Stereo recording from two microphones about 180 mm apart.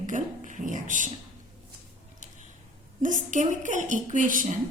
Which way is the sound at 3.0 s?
45° right (ahead or behind).